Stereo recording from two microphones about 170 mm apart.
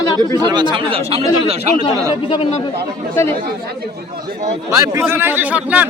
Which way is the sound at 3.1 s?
15° left (ahead or behind).